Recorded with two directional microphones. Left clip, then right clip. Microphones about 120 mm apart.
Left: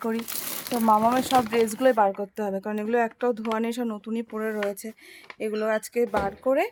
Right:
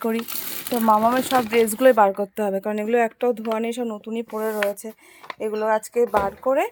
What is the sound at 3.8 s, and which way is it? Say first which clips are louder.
Speech: right 3 dB; 30° left (ahead or behind).